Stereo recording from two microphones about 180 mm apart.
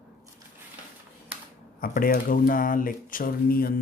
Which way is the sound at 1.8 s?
50° left (ahead or behind).